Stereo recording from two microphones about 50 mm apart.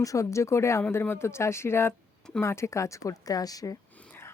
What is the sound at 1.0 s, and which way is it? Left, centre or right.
Speech, left.